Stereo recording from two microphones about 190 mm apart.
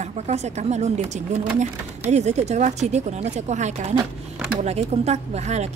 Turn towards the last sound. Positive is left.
turn(degrees=-35)  # may be behind; listen again after turning